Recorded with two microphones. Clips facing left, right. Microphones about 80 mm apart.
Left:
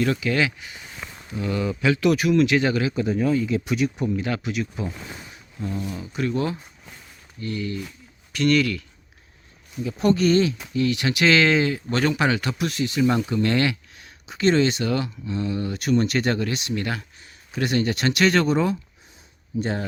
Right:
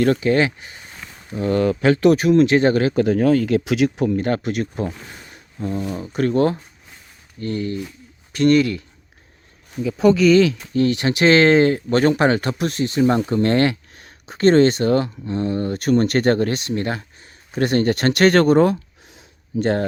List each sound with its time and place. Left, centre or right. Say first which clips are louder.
0.0 s speech: right 6 dB; right
2.9 s speech: right 6 dB; right
4.2 s speech: right 5 dB; right
5.3 s a sound: right 6 dB; right
5.8 s speech: right 7 dB; right
10.2 s speech: right 6 dB; right
10.8 s speech: right 4 dB; right